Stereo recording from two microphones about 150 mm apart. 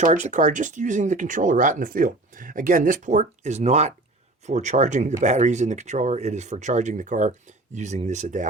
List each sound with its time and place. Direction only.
0.0 s speech: 55° right (ahead or behind)